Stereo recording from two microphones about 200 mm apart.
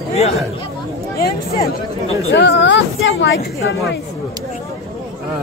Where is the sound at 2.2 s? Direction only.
65° left (ahead or behind).